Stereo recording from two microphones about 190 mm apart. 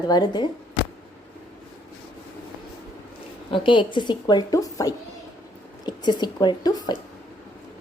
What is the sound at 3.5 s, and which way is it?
A woman's voice, 25° left (ahead or behind).